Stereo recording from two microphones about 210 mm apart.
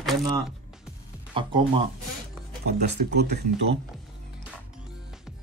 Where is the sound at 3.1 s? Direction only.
50° right (ahead or behind).